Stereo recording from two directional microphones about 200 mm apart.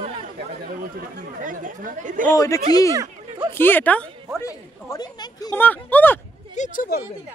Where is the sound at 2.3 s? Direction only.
15° left (ahead or behind).